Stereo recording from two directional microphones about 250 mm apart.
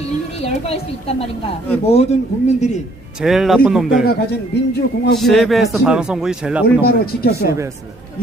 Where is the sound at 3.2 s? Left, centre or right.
Centre.